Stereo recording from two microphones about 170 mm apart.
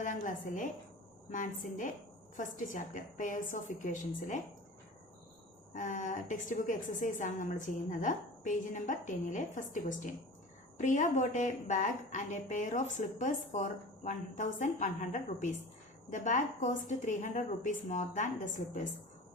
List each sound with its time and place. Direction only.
0.0 s a woman's voice: 50° left (ahead or behind)
5.7 s a woman's voice: 50° left (ahead or behind)